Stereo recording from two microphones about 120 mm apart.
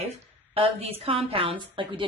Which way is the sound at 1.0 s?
50° right (ahead or behind).